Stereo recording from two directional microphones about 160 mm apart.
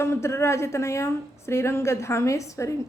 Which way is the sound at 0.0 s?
15° left (ahead or behind).